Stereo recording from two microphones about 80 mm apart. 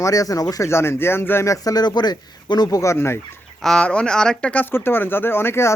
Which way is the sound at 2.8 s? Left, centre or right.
Left.